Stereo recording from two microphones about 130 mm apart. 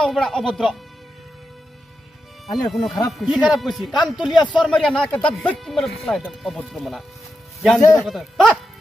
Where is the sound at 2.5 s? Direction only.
Centre (ahead or behind).